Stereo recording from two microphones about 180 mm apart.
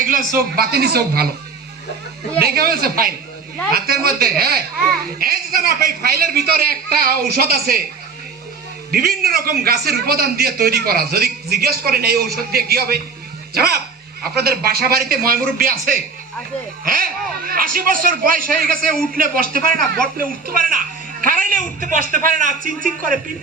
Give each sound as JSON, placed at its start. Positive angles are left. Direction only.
{"t": 0.0, "sound": "a man's voice", "side_deg": -50}
{"t": 2.4, "sound": "a man's voice", "side_deg": -60}
{"t": 8.9, "sound": "a man's voice", "side_deg": -60}